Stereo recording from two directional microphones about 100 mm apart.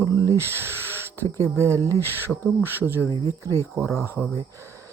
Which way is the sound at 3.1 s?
40° right (ahead or behind).